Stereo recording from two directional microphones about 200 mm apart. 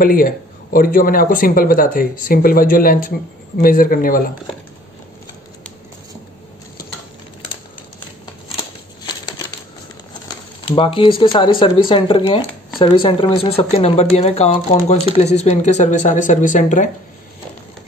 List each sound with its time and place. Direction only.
0.0 s speech: 45° left (ahead or behind)
10.7 s speech: 25° left (ahead or behind)